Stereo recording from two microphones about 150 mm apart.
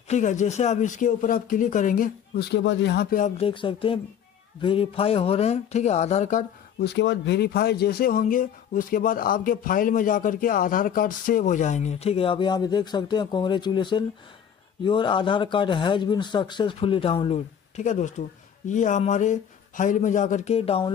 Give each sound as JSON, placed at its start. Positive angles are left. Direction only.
{"t": 0.1, "sound": "speech", "side_deg": 55}
{"t": 3.0, "sound": "speech", "side_deg": 65}
{"t": 3.3, "sound": "a man's voice", "side_deg": 35}
{"t": 7.3, "sound": "a man's voice", "side_deg": 90}